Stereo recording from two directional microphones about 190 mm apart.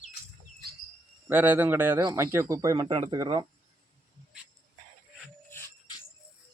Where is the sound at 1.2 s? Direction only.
10° right (ahead or behind).